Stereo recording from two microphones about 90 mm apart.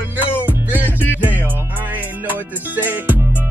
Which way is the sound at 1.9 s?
20° right (ahead or behind).